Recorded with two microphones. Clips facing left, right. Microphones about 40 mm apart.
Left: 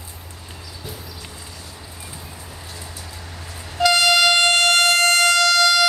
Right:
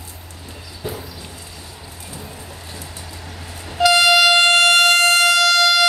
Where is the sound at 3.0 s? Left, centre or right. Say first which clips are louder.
Right 2 dB; centre.